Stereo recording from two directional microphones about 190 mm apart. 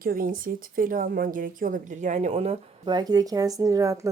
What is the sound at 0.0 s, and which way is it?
A woman's voice, 50° right (ahead or behind).